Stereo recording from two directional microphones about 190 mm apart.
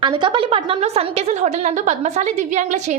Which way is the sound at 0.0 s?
25° right (ahead or behind).